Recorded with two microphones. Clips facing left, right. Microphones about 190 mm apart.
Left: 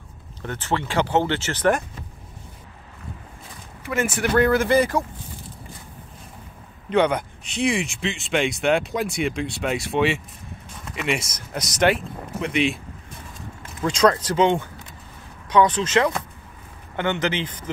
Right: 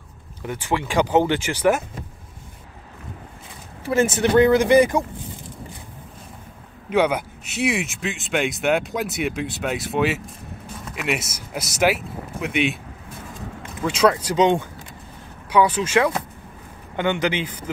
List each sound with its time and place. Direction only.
0.4 s speech: 10° right (ahead or behind)
3.8 s speech: 30° right (ahead or behind)
6.9 s speech: 5° right (ahead or behind)
13.8 s speech: 5° right (ahead or behind)